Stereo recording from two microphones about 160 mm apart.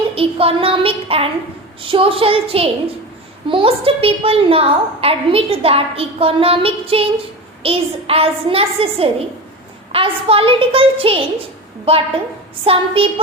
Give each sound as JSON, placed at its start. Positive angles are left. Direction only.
{"t": 0.1, "sound": "a woman's voice", "side_deg": -35}